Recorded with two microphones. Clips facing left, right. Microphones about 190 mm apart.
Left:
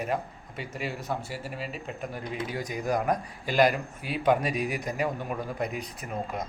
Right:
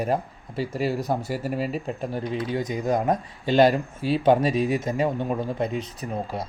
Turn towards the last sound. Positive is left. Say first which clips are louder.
# right 3 dB
turn(degrees=-30)  # may be behind; listen again after turning